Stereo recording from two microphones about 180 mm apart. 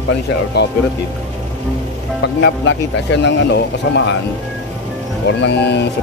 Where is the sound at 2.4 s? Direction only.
80° left.